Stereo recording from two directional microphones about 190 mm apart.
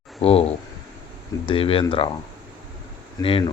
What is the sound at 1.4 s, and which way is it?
Speech, 30° left (ahead or behind).